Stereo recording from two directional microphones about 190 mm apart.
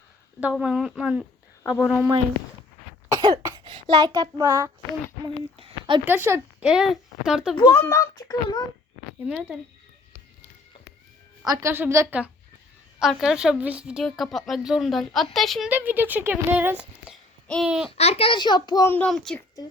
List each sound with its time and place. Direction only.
0.3 s speech: 5° right (ahead or behind)
3.1 s cough: 20° right (ahead or behind)
3.7 s a child's voice: 25° right (ahead or behind)
5.2 s speech: 25° right (ahead or behind)
6.1 s a woman's voice: 10° right (ahead or behind)
7.5 s a child's voice: 15° left (ahead or behind)
9.2 s a woman's voice: 5° right (ahead or behind)
11.4 s a woman's voice: 15° right (ahead or behind); by 15.7 s centre (ahead or behind)
15.7 s a child's voice: 10° right (ahead or behind)
17.9 s a child's voice: 35° left (ahead or behind); by 19.4 s 5° left (ahead or behind)